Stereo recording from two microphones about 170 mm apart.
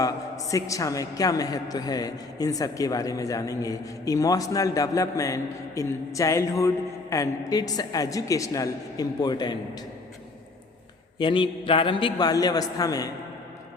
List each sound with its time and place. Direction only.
0.0 s a man's voice: 20° left (ahead or behind)
11.2 s a man's voice: 30° left (ahead or behind)